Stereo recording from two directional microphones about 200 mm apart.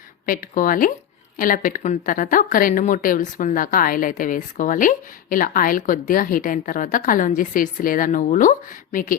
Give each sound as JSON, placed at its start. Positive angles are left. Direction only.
{"t": 0.3, "sound": "speech", "side_deg": 45}